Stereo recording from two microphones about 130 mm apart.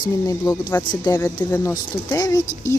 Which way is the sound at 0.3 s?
30° left (ahead or behind).